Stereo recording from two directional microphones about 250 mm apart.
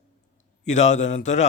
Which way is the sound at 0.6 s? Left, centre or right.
Left.